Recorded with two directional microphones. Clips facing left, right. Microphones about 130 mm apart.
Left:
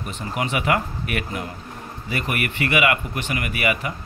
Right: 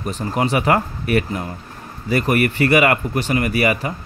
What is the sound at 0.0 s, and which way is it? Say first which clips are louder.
Speech: right 6 dB; 35° right (ahead or behind).